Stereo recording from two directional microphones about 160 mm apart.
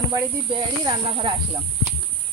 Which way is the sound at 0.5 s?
35° right (ahead or behind).